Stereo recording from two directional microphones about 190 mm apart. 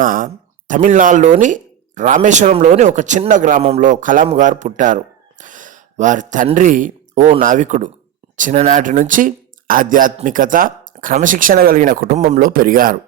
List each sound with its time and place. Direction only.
0.0 s speech: 45° right (ahead or behind)